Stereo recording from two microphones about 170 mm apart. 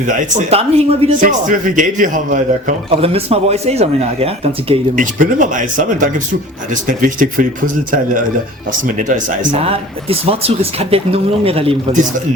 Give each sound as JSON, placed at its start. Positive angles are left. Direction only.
{"t": 0.1, "sound": "speech", "side_deg": -50}
{"t": 1.2, "sound": "speech", "side_deg": -50}
{"t": 2.9, "sound": "speech", "side_deg": -35}
{"t": 4.9, "sound": "speech", "side_deg": -50}
{"t": 9.6, "sound": "speech", "side_deg": -35}